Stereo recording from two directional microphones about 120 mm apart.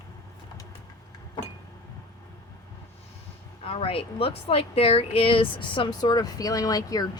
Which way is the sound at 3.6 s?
50° left (ahead or behind).